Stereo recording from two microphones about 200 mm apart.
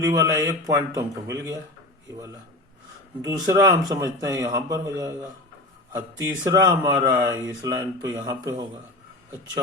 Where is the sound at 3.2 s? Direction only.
20° right (ahead or behind).